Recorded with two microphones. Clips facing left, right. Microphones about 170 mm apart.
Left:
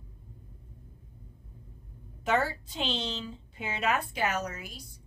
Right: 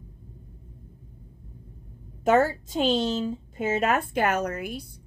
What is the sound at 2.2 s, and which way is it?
A woman's voice, 45° right (ahead or behind).